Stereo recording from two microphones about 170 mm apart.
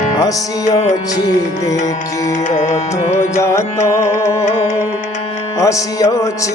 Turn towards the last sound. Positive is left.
turn(degrees=20)  # may be behind; listen again after turning